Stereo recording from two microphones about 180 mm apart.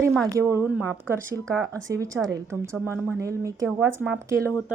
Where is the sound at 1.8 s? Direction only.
15° right (ahead or behind).